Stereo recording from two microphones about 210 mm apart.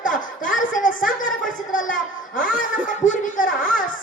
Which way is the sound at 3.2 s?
40° left (ahead or behind).